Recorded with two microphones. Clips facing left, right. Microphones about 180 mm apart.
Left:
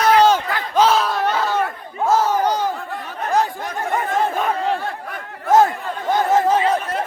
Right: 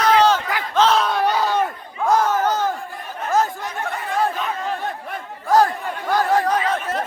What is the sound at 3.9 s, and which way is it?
Chatter, 50° left (ahead or behind).